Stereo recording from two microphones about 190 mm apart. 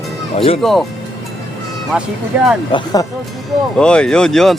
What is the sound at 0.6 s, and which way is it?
Speech, centre (ahead or behind).